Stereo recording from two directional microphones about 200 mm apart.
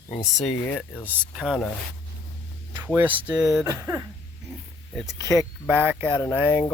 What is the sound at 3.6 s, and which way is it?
Speech, 15° right (ahead or behind).